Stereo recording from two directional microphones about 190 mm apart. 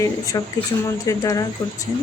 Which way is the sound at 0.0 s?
20° left (ahead or behind).